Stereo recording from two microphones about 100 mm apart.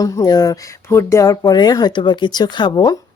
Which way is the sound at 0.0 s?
35° left (ahead or behind).